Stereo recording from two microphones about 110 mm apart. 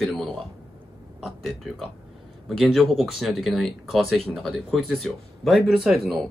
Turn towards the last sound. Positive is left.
turn(degrees=-5)  # may be behind; listen again after turning